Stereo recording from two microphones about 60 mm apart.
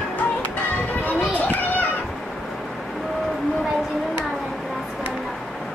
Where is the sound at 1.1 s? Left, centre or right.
Left.